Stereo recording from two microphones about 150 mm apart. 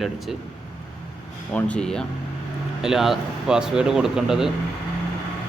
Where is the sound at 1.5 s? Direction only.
10° left (ahead or behind).